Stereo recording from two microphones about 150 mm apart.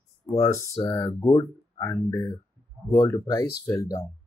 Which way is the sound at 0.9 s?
15° left (ahead or behind).